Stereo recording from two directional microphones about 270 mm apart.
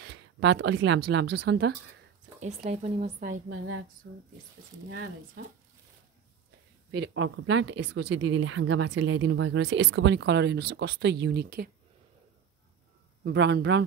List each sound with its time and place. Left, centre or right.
0.0 s speech: right
2.4 s speech: right
3.4 s speech: right
6.9 s speech: right
13.2 s speech: right